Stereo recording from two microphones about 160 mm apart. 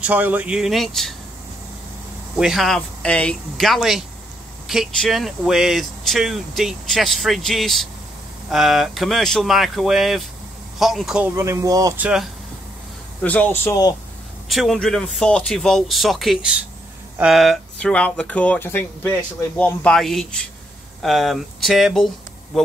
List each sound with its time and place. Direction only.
0.0 s speech: 10° right (ahead or behind)
2.3 s speech: 5° right (ahead or behind)
11.3 s speech: 20° right (ahead or behind)
12.0 s speech: 5° right (ahead or behind)
13.2 s speech: 10° left (ahead or behind)
14.5 s speech: centre (ahead or behind)